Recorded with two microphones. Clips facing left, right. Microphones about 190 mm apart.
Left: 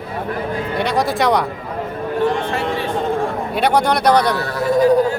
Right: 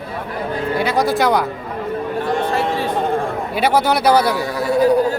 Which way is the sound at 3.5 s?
5° right (ahead or behind).